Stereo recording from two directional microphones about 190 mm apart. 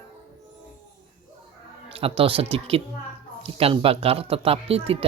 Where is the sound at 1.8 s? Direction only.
30° right (ahead or behind).